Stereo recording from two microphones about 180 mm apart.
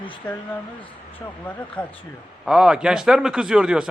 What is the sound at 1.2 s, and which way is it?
Speech, 15° left (ahead or behind).